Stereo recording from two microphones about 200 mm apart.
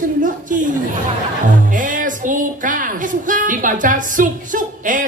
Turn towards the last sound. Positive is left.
turn(degrees=-40)  # may be behind; listen again after turning